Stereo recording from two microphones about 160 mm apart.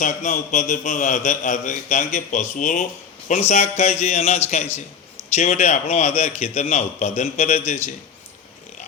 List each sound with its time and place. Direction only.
0.0 s a man's voice: 50° left (ahead or behind)